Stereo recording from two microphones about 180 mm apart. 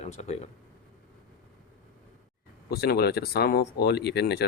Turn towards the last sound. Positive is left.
turn(degrees=65)  # may be behind; listen again after turning